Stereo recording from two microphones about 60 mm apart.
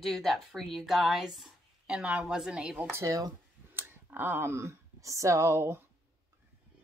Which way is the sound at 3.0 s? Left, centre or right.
Right.